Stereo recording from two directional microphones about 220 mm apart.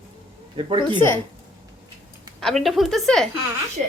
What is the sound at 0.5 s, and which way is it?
Speech, 25° right (ahead or behind).